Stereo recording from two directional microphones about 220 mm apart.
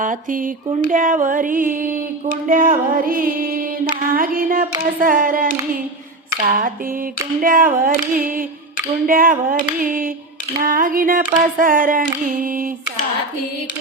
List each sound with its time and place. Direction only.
0.0 s mantra: 35° right (ahead or behind)